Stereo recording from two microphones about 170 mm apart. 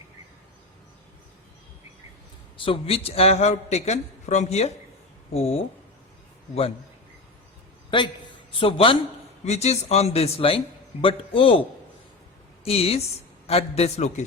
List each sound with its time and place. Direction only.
2.6 s a man's voice: 35° left (ahead or behind)
7.9 s a man's voice: 30° left (ahead or behind)
12.6 s a man's voice: 35° left (ahead or behind)